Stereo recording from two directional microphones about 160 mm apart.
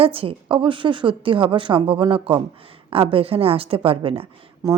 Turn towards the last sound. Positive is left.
turn(degrees=-20)  # may be behind; listen again after turning